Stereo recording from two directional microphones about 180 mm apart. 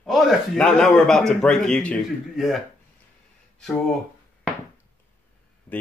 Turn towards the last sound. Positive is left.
turn(degrees=10)  # may be behind; listen again after turning